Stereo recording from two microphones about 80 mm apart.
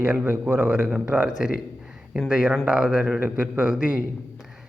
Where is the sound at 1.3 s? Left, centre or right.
Centre.